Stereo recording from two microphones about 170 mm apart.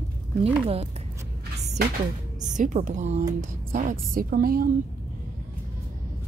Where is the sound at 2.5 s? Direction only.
45° right (ahead or behind).